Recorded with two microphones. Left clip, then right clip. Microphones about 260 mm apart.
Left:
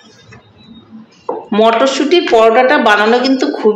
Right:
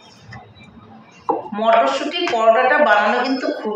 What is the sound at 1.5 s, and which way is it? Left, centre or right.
A woman's voice, left.